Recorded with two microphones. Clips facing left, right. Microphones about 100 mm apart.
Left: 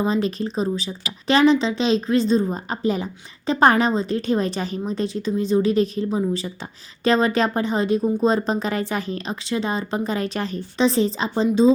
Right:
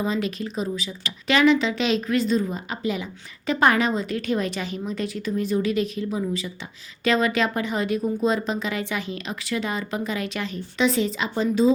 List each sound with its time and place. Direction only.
0.0 s a woman's voice: 35° left (ahead or behind)